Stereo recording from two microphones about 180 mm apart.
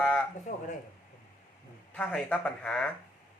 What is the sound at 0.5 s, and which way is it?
Speech, 45° left (ahead or behind).